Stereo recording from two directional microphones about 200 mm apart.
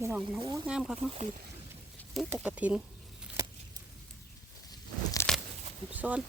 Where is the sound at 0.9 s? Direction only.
30° right (ahead or behind).